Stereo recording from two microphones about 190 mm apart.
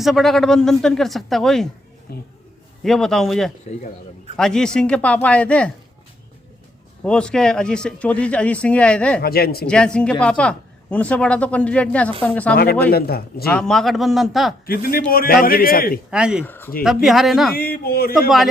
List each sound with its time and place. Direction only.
0.0 s a woman's voice: centre (ahead or behind)
2.1 s speech: 55° left (ahead or behind)
2.8 s a woman's voice: 5° left (ahead or behind)
7.0 s a woman's voice: 5° left (ahead or behind)
9.2 s speech: 55° left (ahead or behind)
9.6 s a woman's voice: 5° left (ahead or behind)
12.9 s a man's voice: 55° left (ahead or behind)
13.5 s a woman's voice: 5° left (ahead or behind)
14.7 s a man's voice: 50° left (ahead or behind)
16.0 s a woman's voice: 5° right (ahead or behind)
16.5 s speech: 10° left (ahead or behind)
16.8 s a woman's voice: centre (ahead or behind)
17.5 s a man's voice: 55° left (ahead or behind)